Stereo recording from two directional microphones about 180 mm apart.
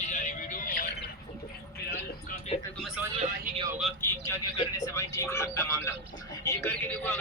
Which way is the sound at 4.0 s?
15° left (ahead or behind).